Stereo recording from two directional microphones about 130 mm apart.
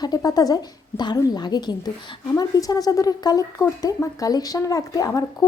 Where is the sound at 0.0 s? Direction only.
30° left (ahead or behind).